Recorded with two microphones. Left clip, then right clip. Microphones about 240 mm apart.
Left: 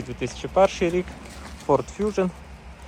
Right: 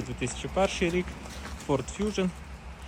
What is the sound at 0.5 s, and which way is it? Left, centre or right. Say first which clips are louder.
Speech: left 8 dB; left.